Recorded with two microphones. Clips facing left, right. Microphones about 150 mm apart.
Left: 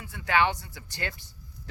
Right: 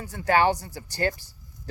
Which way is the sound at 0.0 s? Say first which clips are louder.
Right 4 dB; 40° right (ahead or behind).